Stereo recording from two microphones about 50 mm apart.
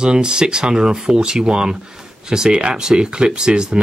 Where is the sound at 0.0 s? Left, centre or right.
Centre.